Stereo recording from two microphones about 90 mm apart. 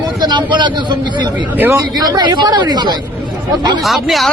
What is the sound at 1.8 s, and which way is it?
Speech, 45° right (ahead or behind).